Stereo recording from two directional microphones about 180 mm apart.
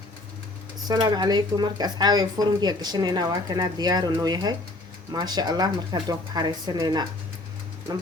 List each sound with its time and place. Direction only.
0.9 s speech: 20° right (ahead or behind)